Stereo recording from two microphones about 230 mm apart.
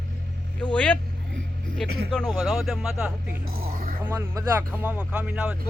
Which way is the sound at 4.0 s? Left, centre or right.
Centre.